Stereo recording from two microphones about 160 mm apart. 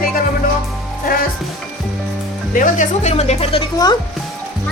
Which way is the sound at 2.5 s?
55° left (ahead or behind).